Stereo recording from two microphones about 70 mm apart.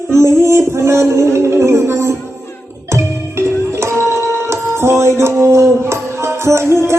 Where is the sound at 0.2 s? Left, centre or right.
Right.